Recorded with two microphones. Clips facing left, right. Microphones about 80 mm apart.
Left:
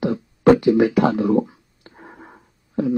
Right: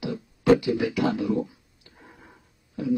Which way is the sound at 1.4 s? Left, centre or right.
Left.